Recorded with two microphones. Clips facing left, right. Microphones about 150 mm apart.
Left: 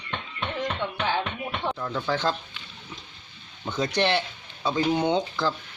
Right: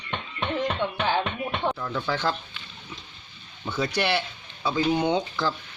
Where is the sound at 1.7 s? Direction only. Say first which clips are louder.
Left 1 dB; 15° left (ahead or behind).